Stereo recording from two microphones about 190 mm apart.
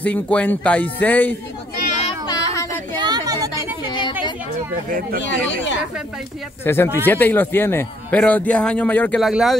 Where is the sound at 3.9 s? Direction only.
25° left (ahead or behind).